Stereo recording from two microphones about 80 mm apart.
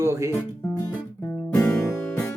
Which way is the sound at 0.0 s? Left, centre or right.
Right.